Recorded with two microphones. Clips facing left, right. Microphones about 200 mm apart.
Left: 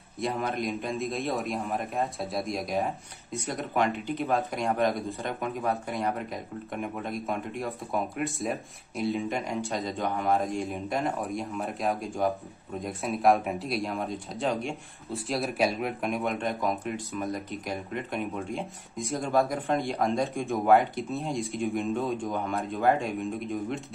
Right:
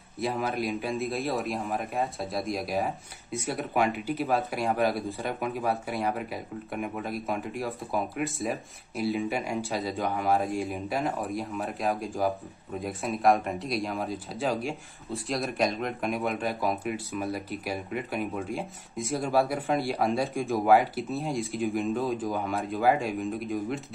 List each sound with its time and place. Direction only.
0.2 s speech: centre (ahead or behind)